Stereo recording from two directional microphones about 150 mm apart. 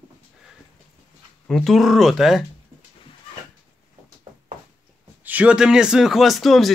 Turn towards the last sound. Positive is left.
turn(degrees=0)  # may be behind; listen again after turning